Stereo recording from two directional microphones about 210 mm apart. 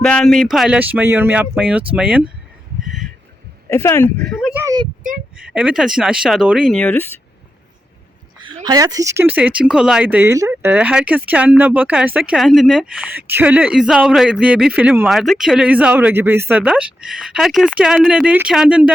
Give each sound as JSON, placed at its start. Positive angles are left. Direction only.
{"t": 0.0, "sound": "speech", "side_deg": 5}
{"t": 3.7, "sound": "speech", "side_deg": 10}
{"t": 4.6, "sound": "a sound", "side_deg": -20}
{"t": 5.5, "sound": "speech", "side_deg": -5}
{"t": 8.6, "sound": "speech", "side_deg": -20}